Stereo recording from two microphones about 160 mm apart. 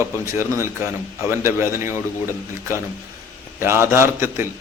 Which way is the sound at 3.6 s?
15° right (ahead or behind).